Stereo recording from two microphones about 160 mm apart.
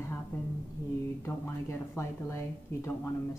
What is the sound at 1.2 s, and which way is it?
Speech, 15° left (ahead or behind).